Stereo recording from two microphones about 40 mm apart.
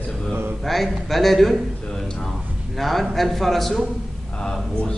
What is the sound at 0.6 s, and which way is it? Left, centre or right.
Speech, centre.